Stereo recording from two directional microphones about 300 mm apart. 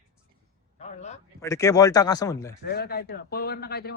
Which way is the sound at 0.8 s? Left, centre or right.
Left.